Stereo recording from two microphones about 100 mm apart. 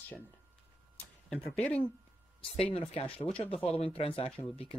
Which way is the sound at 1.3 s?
15° left (ahead or behind).